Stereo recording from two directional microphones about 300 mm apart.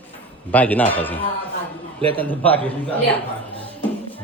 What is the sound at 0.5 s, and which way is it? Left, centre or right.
Speech, centre.